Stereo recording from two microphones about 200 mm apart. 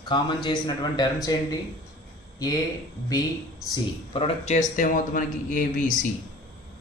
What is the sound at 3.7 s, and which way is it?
A man's voice, 25° left (ahead or behind).